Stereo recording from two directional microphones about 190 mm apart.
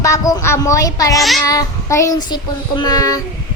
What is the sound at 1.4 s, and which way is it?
Child singing, 20° left (ahead or behind).